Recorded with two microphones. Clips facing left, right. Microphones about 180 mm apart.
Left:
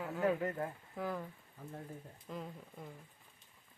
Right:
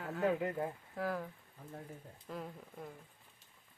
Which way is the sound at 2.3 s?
Centre (ahead or behind).